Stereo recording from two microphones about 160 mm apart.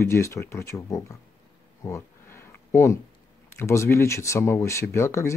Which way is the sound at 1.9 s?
15° left (ahead or behind).